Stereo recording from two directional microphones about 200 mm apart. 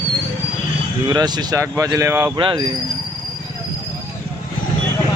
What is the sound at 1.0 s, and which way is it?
Speech, 20° right (ahead or behind).